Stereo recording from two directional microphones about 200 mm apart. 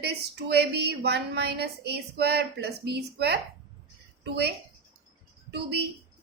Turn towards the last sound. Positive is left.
turn(degrees=-55)  # may be behind; listen again after turning